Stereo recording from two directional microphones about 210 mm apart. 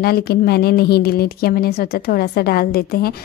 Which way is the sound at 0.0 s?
45° left (ahead or behind).